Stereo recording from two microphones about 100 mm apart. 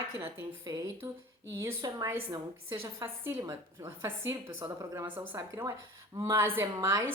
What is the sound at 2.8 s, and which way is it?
A woman's voice, 25° right (ahead or behind).